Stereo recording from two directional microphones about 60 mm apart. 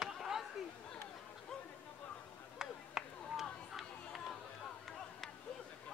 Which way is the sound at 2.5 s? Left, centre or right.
Centre.